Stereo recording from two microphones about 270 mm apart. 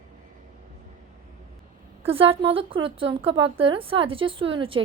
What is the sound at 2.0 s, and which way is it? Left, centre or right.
A woman's voice, centre.